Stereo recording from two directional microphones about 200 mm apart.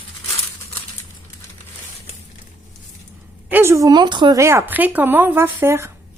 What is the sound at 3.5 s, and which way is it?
A woman's voice, 15° right (ahead or behind).